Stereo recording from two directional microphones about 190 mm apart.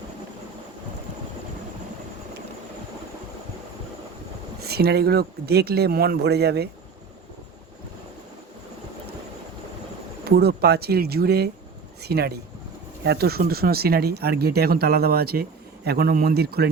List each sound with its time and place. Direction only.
4.6 s speech: 55° right (ahead or behind)
10.2 s speech: 55° right (ahead or behind)